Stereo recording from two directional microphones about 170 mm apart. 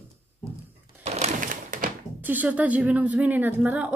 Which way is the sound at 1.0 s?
40° right (ahead or behind).